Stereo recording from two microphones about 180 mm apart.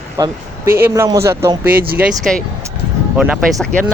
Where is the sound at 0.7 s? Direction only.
15° right (ahead or behind).